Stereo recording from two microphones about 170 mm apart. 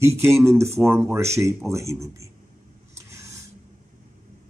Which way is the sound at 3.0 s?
15° right (ahead or behind).